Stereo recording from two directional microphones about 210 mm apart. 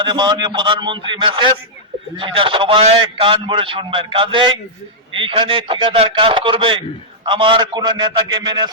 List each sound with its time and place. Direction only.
0.0 s a man's voice: 20° right (ahead or behind)